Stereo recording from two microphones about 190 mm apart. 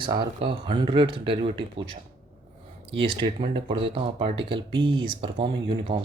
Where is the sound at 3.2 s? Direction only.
25° right (ahead or behind).